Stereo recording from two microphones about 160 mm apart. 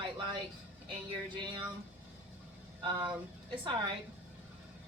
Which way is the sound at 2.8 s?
30° right (ahead or behind).